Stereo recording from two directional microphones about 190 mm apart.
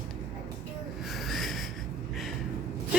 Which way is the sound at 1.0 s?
Centre (ahead or behind).